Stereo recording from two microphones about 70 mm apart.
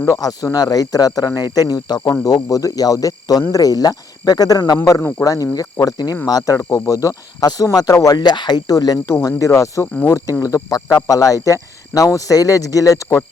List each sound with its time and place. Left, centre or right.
0.1 s speech: left
1.5 s speech: left
2.2 s speech: left
4.9 s speech: left
8.1 s speech: left
9.0 s speech: left
9.8 s speech: left
10.4 s speech: left